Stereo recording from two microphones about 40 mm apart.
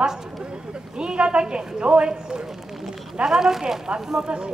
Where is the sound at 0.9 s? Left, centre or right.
Right.